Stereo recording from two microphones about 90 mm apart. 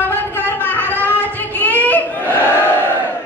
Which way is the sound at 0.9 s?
20° left (ahead or behind).